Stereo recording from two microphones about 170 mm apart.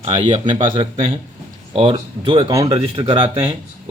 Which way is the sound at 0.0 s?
40° right (ahead or behind).